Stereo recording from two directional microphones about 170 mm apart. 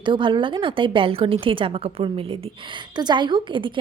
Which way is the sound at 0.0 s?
30° right (ahead or behind).